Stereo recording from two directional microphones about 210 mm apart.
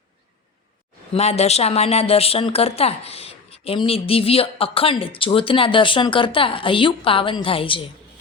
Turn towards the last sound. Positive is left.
turn(degrees=25)  # may be behind; listen again after turning